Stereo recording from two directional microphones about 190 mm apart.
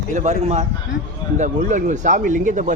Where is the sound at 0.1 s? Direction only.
35° right (ahead or behind).